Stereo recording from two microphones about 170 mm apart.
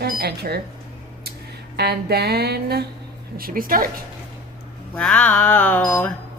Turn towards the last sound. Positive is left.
turn(degrees=10)  # may be behind; listen again after turning